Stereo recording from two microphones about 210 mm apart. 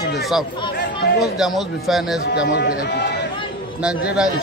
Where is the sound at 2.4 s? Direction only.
55° left (ahead or behind).